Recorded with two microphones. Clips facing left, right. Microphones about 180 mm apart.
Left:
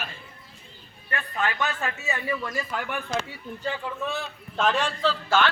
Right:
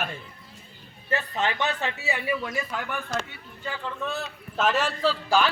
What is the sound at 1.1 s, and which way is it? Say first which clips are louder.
A man's voice: right 2 dB; 25° right (ahead or behind).